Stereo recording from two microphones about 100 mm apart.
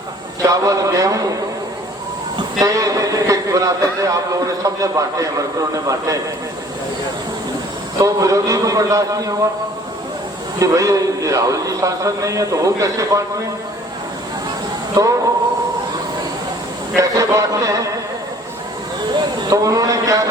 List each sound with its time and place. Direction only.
0.4 s a man's voice: 35° right (ahead or behind)
2.6 s a man's voice: 35° right (ahead or behind)
7.9 s a man's voice: 35° right (ahead or behind)
10.6 s a man's voice: 35° right (ahead or behind)
15.0 s a man's voice: 35° right (ahead or behind)
17.0 s a man's voice: 35° right (ahead or behind)
19.1 s a sound: 50° right (ahead or behind)
19.5 s a man's voice: 35° right (ahead or behind)